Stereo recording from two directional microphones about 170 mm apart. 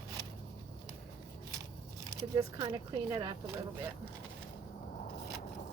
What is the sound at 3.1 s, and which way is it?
Speech, 20° right (ahead or behind).